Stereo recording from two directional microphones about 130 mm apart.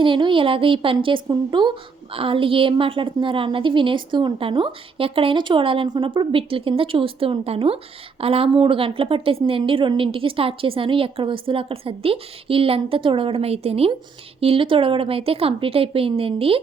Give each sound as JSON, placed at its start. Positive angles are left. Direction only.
{"t": 0.0, "sound": "a woman's voice", "side_deg": -40}